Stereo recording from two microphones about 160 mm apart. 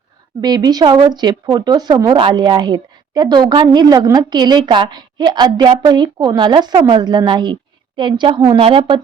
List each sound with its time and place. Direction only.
0.4 s speech: 25° right (ahead or behind)